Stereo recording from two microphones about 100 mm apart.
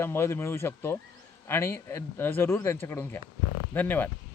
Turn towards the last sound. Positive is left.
turn(degrees=20)  # may be behind; listen again after turning